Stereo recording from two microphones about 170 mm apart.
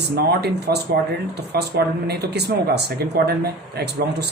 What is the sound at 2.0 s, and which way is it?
Speech, 75° right (ahead or behind).